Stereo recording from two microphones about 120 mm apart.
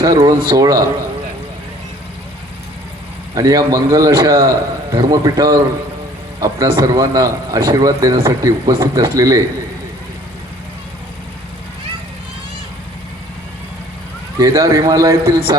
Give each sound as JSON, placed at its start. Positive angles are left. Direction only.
{"t": 0.0, "sound": "speech", "side_deg": -30}
{"t": 3.3, "sound": "a man's voice", "side_deg": -30}
{"t": 14.3, "sound": "a man's voice", "side_deg": -25}